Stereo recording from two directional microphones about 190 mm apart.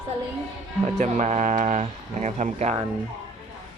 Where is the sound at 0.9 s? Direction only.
40° right (ahead or behind).